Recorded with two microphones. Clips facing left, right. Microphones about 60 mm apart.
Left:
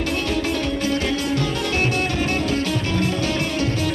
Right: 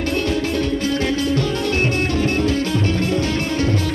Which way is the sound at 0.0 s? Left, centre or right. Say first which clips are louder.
Right 2 dB; right.